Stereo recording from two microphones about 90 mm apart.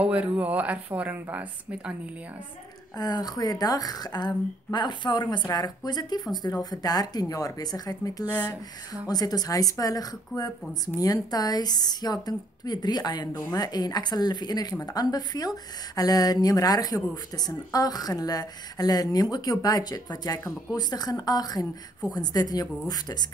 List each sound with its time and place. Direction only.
0.0 s speech: 15° right (ahead or behind)
3.0 s a woman's voice: 45° left (ahead or behind)